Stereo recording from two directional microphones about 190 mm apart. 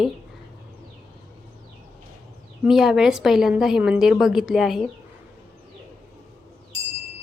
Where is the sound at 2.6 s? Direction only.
Centre (ahead or behind).